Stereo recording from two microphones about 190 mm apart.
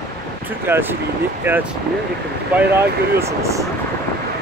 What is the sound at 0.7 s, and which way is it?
Speech, 10° right (ahead or behind).